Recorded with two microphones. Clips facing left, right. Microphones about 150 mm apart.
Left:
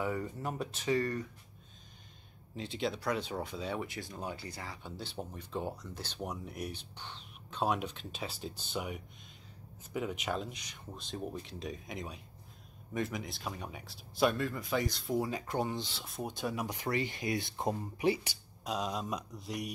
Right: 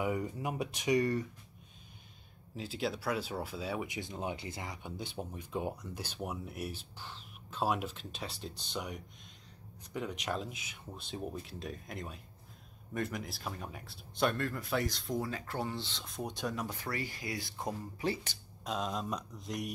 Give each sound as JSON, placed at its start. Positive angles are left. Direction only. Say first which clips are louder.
{"t": 0.0, "sound": "speech", "louder": "right 1 dB", "side_deg": -10}
{"t": 2.5, "sound": "speech", "louder": "left 1 dB", "side_deg": -5}
{"t": 3.8, "sound": "speech", "louder": "right 2 dB", "side_deg": -20}
{"t": 15.1, "sound": "speech", "louder": "left 5 dB", "side_deg": 15}
{"t": 16.6, "sound": "speech", "louder": "left 4 dB", "side_deg": 20}
{"t": 18.6, "sound": "speech", "louder": "even", "side_deg": 0}